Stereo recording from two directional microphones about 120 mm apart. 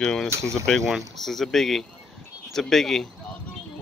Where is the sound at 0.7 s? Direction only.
5° left (ahead or behind).